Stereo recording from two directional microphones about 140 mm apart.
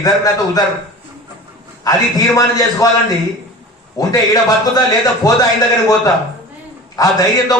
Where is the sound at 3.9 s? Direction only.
25° left (ahead or behind).